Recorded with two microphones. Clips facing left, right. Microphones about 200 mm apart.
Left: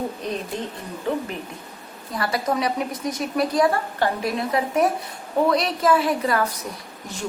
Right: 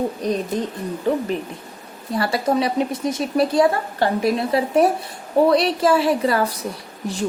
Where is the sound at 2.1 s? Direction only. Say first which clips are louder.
Right 4 dB; 30° right (ahead or behind).